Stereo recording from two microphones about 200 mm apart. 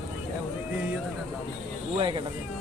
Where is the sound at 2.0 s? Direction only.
25° right (ahead or behind).